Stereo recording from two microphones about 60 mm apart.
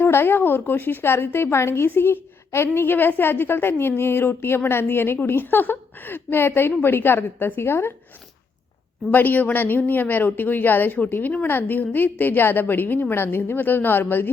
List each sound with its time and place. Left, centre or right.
0.0 s a woman's voice: left
9.1 s a woman's voice: left